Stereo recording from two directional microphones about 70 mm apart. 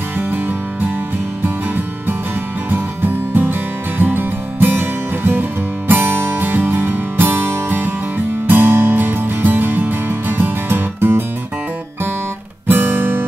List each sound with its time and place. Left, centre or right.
0.2 s music: right
2.7 s music: right
12.6 s music: right